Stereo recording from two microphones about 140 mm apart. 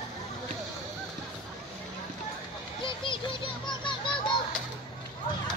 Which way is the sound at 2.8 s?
35° left (ahead or behind).